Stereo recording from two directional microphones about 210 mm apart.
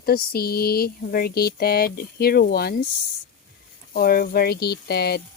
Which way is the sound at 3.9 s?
45° left (ahead or behind).